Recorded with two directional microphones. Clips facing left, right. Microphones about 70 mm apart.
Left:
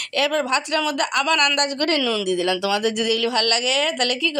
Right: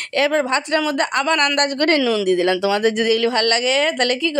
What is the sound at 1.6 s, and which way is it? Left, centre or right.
A woman's voice, right.